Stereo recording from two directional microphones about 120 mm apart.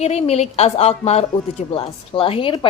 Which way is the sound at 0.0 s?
60° left (ahead or behind).